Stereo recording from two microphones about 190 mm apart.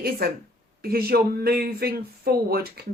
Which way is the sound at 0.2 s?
55° right (ahead or behind).